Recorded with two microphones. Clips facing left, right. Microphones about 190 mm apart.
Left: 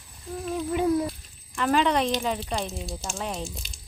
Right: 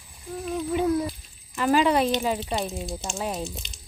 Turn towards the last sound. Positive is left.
turn(degrees=0)  # may be behind; listen again after turning